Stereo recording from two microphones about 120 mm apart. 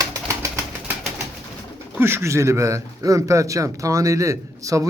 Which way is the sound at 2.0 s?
20° right (ahead or behind).